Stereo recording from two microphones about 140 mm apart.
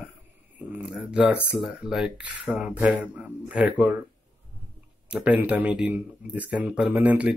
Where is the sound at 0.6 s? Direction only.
10° right (ahead or behind).